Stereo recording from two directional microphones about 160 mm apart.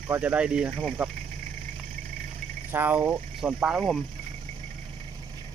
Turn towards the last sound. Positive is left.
turn(degrees=-5)  # may be behind; listen again after turning